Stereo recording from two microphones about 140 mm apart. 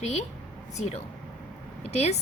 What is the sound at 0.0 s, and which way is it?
A woman's voice, 55° left (ahead or behind).